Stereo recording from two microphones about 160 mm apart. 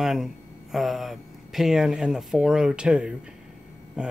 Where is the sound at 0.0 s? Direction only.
Centre (ahead or behind).